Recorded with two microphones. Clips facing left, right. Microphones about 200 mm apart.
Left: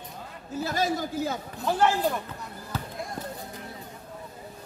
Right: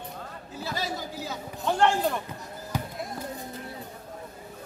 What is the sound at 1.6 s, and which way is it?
Speech, 5° left (ahead or behind).